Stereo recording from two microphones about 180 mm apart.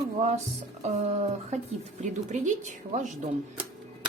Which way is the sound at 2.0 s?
40° right (ahead or behind).